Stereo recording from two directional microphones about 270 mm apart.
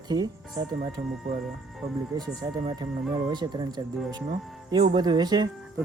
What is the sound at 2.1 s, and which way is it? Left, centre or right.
Speech, centre.